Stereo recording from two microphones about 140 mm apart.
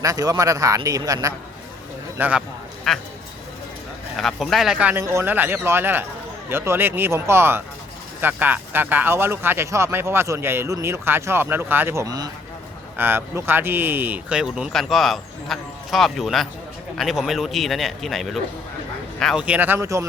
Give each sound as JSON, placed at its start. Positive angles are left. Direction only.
{"t": 0.0, "sound": "speech", "side_deg": -25}
{"t": 2.1, "sound": "speech", "side_deg": -10}
{"t": 2.9, "sound": "speech", "side_deg": 0}
{"t": 4.2, "sound": "speech", "side_deg": 0}
{"t": 13.0, "sound": "speech", "side_deg": -15}